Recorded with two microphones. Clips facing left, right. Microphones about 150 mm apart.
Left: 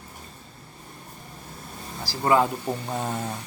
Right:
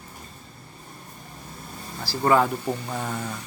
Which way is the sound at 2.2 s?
20° left (ahead or behind).